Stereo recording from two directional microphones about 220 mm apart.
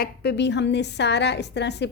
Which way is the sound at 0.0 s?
50° left (ahead or behind).